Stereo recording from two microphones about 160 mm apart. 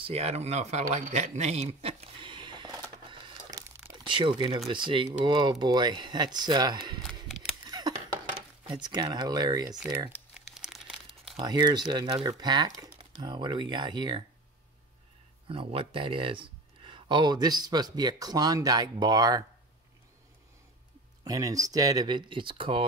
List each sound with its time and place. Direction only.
0.0 s a sound: 40° right (ahead or behind)
4.6 s speech: 30° right (ahead or behind)
8.6 s speech: 25° right (ahead or behind)
9.8 s speech: 15° right (ahead or behind)
10.3 s crumpling: centre (ahead or behind)
11.3 s speech: 25° right (ahead or behind)
15.4 s speech: 35° right (ahead or behind)
21.2 s speech: 25° right (ahead or behind)